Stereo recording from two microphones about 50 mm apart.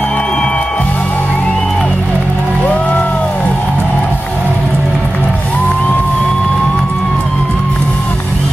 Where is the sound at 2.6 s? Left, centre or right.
Left.